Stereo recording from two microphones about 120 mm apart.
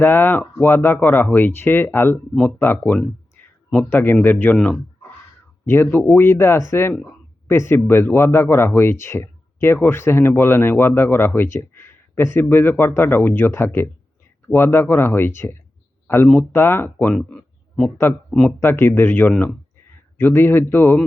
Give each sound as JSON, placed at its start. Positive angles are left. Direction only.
{"t": 0.0, "sound": "speech", "side_deg": 15}
{"t": 4.5, "sound": "speech", "side_deg": 5}
{"t": 5.6, "sound": "speech", "side_deg": 15}
{"t": 17.2, "sound": "a sound", "side_deg": 5}
{"t": 18.3, "sound": "speech", "side_deg": 0}
{"t": 18.6, "sound": "speech", "side_deg": 20}